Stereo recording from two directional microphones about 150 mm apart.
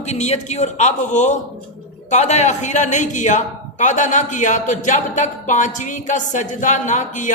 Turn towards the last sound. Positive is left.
turn(degrees=55)  # may be behind; listen again after turning